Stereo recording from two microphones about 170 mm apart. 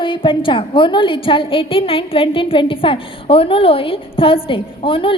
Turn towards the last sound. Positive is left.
turn(degrees=30)  # may be behind; listen again after turning